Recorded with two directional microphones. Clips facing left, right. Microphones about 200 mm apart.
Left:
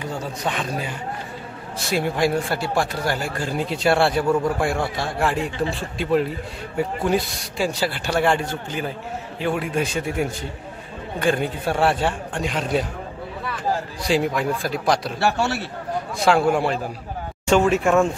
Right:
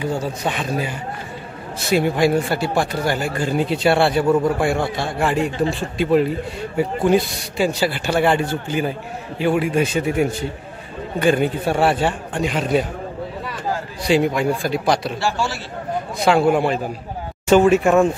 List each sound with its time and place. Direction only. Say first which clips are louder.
0.0 s a man's voice: right 4 dB; 5° right (ahead or behind)
14.0 s a man's voice: right 4 dB; centre (ahead or behind)
15.1 s a man's voice: left 1 dB; 60° left (ahead or behind)
16.2 s a man's voice: right 2 dB; centre (ahead or behind)